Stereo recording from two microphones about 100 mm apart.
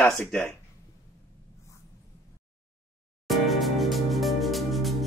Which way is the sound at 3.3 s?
Centre (ahead or behind).